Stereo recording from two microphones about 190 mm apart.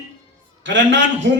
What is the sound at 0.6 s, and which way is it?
Speech, 75° right (ahead or behind).